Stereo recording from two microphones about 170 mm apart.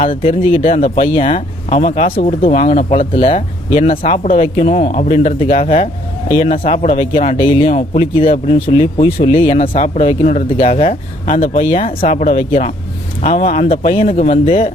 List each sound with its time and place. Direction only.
0.0 s speech: 35° left (ahead or behind)